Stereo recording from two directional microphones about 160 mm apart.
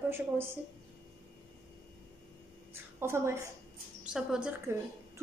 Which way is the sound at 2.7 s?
15° right (ahead or behind).